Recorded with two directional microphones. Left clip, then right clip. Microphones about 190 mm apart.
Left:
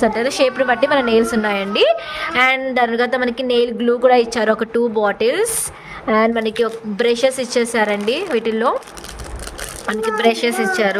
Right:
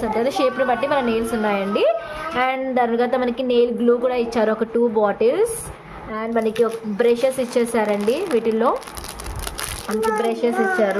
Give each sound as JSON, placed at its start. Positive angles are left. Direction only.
{"t": 0.0, "sound": "a woman's voice", "side_deg": 40}
{"t": 10.2, "sound": "speech", "side_deg": 60}